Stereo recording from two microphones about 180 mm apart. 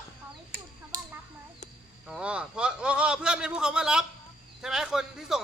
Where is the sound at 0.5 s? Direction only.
50° right (ahead or behind).